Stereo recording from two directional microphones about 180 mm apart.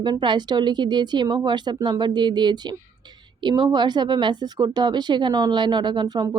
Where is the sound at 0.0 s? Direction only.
25° right (ahead or behind).